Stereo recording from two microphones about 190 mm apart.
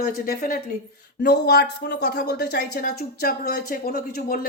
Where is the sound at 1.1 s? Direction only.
60° left (ahead or behind).